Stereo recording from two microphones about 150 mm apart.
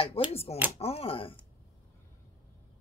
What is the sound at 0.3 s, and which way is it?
Speech, 40° left (ahead or behind).